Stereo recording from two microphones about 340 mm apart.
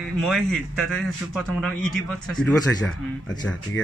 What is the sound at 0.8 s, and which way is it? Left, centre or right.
Speech, centre.